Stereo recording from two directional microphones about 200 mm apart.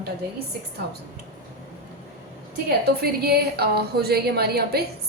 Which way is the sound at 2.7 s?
50° right (ahead or behind).